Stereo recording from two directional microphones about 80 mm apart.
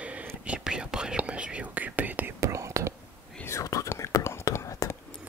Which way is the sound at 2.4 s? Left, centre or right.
Right.